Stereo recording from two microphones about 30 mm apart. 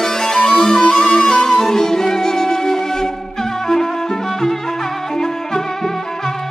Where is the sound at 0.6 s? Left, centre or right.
Centre.